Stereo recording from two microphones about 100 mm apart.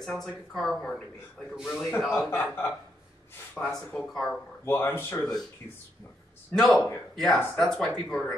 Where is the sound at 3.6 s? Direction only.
10° left (ahead or behind).